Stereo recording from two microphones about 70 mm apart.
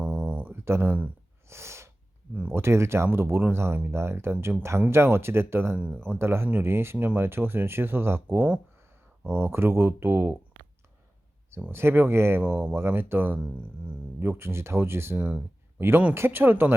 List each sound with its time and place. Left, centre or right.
0.0 s a sound: right
0.5 s a sound: right
0.9 s speech: right
1.5 s sneeze: right
2.5 s speech: right
11.7 s speech: right
12.4 s speech: right
12.7 s speech: right